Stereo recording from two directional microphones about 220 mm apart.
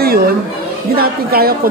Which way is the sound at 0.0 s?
45° right (ahead or behind).